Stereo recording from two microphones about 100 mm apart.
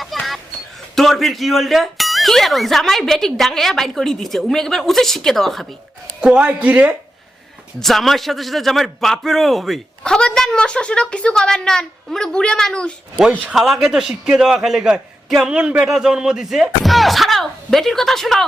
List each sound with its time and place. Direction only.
0.0 s a sound: centre (ahead or behind)
0.9 s a man's voice: centre (ahead or behind)
6.1 s speech: 10° right (ahead or behind)
7.8 s a man's voice: centre (ahead or behind)
13.2 s speech: 15° right (ahead or behind)
13.5 s a man's voice: 5° right (ahead or behind)